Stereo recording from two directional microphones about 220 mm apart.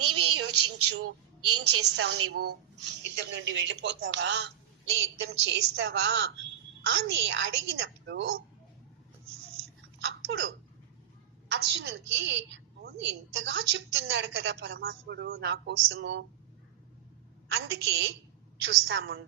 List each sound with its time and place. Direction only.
0.0 s a sound: 90° right
1.0 s a woman's voice: 90° right
2.3 s a woman's voice: 45° right (ahead or behind)
11.5 s a woman's voice: 50° right (ahead or behind)
17.5 s a woman's voice: 50° right (ahead or behind)